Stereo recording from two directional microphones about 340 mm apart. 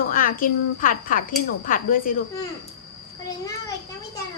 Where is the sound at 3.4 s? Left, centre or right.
Centre.